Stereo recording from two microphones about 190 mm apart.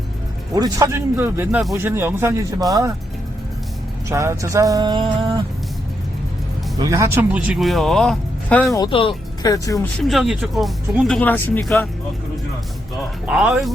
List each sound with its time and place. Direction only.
0.5 s speech: 20° right (ahead or behind)
4.1 s speech: 15° right (ahead or behind)
6.7 s speech: 20° right (ahead or behind); by 8.7 s 5° left (ahead or behind)
8.7 s speech: 25° left (ahead or behind)
10.0 s speech: centre (ahead or behind)
13.2 s speech: 5° right (ahead or behind)